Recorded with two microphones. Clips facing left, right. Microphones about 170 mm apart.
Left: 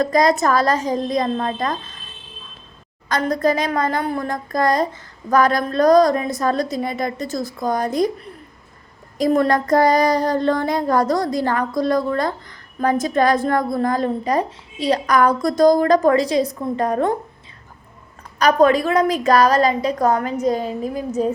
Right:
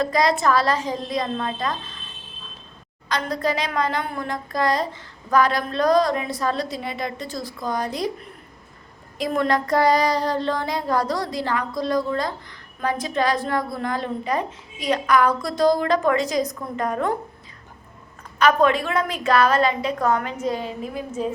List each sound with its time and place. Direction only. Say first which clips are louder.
0.0 s child singing: left 4 dB; 45° left (ahead or behind)
3.1 s child singing: left 5 dB; 45° left (ahead or behind)
9.1 s child singing: left 5 dB; 40° left (ahead or behind)
18.3 s a woman's voice: left 4 dB; 40° left (ahead or behind)